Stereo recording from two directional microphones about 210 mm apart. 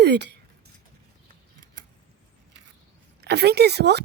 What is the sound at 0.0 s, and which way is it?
Speech, 55° right (ahead or behind).